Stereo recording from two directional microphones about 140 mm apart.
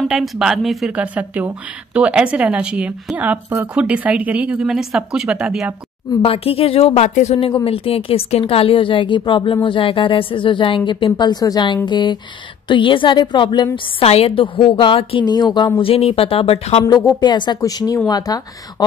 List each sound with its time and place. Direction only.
0.1 s a woman's voice: 5° right (ahead or behind)
6.2 s a woman's voice: 45° left (ahead or behind)
13.9 s a woman's voice: 45° left (ahead or behind)
15.2 s speech: 30° left (ahead or behind)
15.8 s a woman's voice: 45° left (ahead or behind)
16.8 s speech: 25° left (ahead or behind)